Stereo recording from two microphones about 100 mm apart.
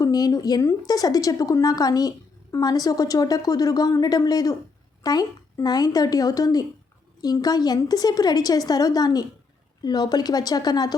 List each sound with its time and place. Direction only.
0.0 s a woman's voice: 40° left (ahead or behind)